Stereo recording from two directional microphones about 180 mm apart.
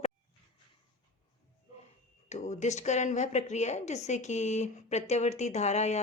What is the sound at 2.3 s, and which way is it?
Speech, 40° left (ahead or behind).